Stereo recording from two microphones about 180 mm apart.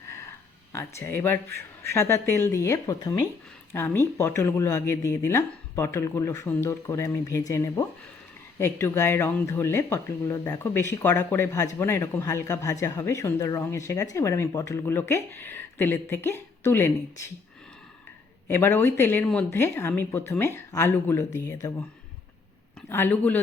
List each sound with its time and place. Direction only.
0.7 s speech: 15° left (ahead or behind)
18.4 s speech: 10° left (ahead or behind)
22.9 s speech: 10° left (ahead or behind)